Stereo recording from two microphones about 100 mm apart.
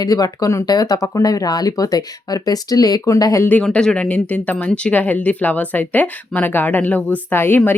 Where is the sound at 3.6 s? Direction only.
10° left (ahead or behind).